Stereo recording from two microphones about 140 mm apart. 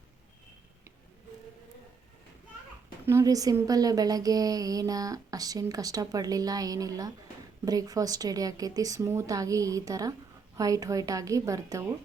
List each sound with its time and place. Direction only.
3.1 s speech: 20° right (ahead or behind)